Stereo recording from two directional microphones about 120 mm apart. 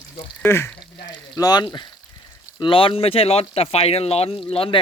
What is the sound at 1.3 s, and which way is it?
Speech, 35° left (ahead or behind).